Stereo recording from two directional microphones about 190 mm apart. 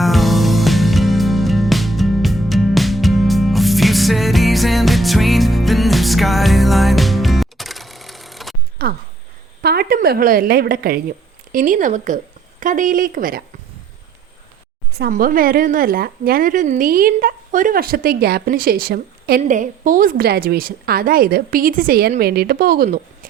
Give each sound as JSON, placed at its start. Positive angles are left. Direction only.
{"t": 0.0, "sound": "music", "side_deg": 0}
{"t": 8.8, "sound": "a sound", "side_deg": -55}
{"t": 9.6, "sound": "a woman's voice", "side_deg": -55}
{"t": 14.9, "sound": "a woman's voice", "side_deg": -50}